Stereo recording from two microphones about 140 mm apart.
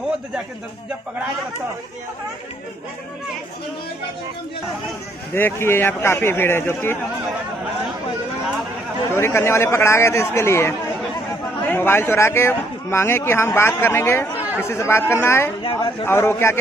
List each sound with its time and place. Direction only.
5.3 s a man's voice: 15° left (ahead or behind)
9.1 s a man's voice: 20° left (ahead or behind)
15.6 s speech: 35° left (ahead or behind)
16.1 s a man's voice: 15° left (ahead or behind)